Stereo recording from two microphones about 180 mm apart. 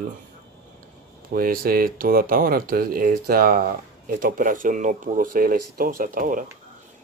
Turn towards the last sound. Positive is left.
turn(degrees=-50)  # may be behind; listen again after turning